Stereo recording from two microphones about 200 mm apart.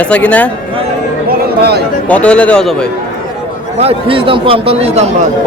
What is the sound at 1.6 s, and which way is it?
Speech, 55° right (ahead or behind).